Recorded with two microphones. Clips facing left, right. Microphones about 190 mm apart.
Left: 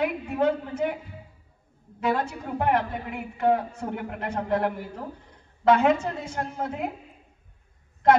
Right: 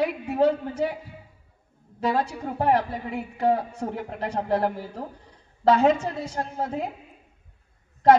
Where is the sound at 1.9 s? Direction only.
35° right (ahead or behind).